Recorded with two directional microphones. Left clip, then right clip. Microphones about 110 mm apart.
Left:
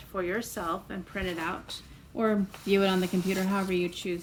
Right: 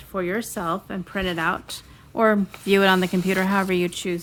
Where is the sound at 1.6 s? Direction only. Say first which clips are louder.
Right 5 dB; 90° right.